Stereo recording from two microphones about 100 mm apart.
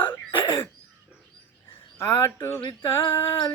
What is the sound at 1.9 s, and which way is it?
Speech, 25° left (ahead or behind).